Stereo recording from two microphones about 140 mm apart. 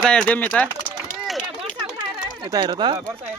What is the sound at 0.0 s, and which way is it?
Speech, 5° left (ahead or behind).